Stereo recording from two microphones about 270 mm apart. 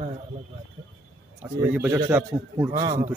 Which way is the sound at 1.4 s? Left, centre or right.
Centre.